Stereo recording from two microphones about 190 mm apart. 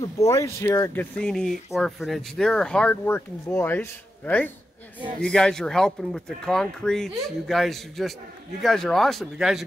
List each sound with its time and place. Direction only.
0.2 s speech: 15° left (ahead or behind)
5.2 s speech: 5° left (ahead or behind)